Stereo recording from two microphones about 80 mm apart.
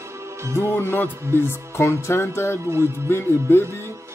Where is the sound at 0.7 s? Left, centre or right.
Left.